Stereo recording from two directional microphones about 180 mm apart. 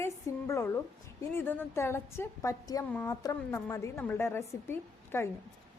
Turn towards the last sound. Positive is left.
turn(degrees=15)  # may be behind; listen again after turning